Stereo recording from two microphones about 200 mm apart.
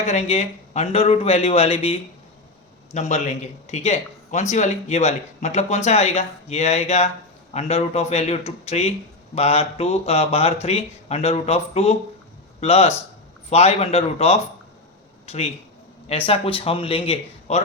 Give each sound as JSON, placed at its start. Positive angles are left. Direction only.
{"t": 0.0, "sound": "a man's voice", "side_deg": 35}